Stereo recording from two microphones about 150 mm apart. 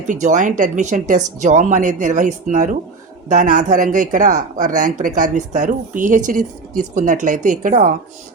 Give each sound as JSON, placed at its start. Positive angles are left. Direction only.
{"t": 0.1, "sound": "speech", "side_deg": -55}